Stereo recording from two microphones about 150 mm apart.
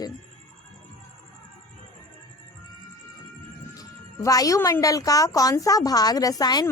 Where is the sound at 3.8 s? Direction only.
25° left (ahead or behind).